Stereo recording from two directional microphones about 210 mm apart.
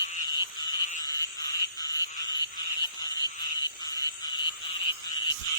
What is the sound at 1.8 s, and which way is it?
Frog, 15° left (ahead or behind).